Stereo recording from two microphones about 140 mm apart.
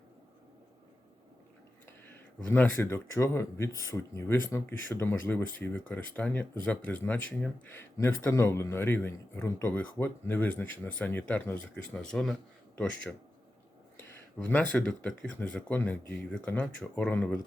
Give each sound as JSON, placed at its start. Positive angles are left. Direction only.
{"t": 2.5, "sound": "speech", "side_deg": 15}
{"t": 14.4, "sound": "speech", "side_deg": 10}